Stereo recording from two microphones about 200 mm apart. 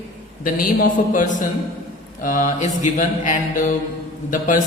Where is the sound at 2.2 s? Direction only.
40° left (ahead or behind).